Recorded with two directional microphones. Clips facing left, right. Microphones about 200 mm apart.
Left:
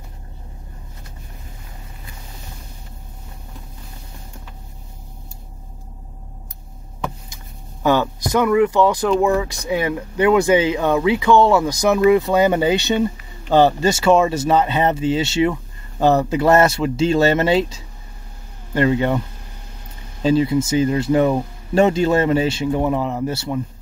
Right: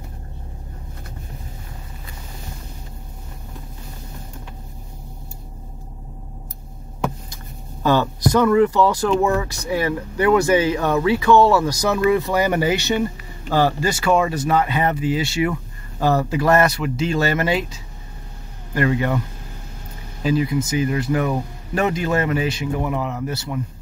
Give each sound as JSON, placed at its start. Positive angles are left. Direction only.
{"t": 7.8, "sound": "speech", "side_deg": 15}
{"t": 20.2, "sound": "speech", "side_deg": 30}